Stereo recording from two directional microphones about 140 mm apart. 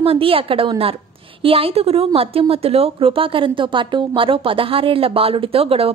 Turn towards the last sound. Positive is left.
turn(degrees=-45)  # may be behind; listen again after turning